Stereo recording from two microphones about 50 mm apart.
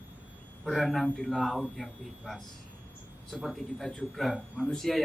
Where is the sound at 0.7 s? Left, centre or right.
Centre.